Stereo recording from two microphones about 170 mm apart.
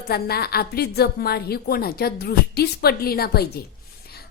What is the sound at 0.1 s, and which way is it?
A woman's voice, 65° left (ahead or behind).